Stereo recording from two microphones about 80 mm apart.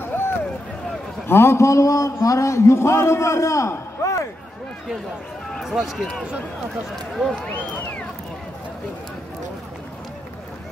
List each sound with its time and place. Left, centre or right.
0.0 s vehicle: left
1.2 s a man's voice: left
5.5 s speech: centre
7.4 s speech: left